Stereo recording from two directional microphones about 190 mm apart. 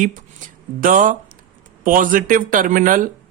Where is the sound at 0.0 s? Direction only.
45° right (ahead or behind).